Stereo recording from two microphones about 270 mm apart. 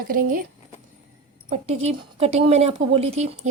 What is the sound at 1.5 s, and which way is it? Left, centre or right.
Speech, right.